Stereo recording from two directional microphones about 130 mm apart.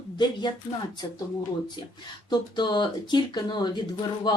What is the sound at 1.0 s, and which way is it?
Speech, 30° left (ahead or behind).